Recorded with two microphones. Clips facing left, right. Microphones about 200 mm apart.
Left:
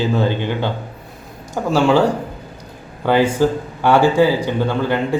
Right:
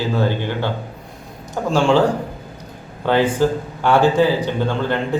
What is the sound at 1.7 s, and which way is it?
Speech, 5° left (ahead or behind).